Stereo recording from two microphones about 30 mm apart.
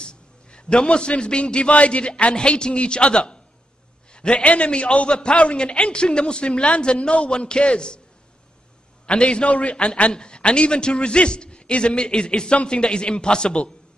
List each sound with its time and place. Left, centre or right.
0.0 s a man's voice: left
9.0 s a man's voice: left